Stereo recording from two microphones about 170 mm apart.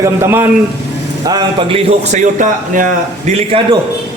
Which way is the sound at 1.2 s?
25° right (ahead or behind).